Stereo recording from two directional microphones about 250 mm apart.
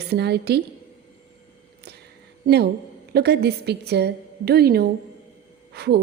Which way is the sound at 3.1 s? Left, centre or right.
Right.